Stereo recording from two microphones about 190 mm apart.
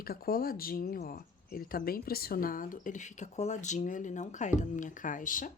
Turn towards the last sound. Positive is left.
turn(degrees=45)  # may be behind; listen again after turning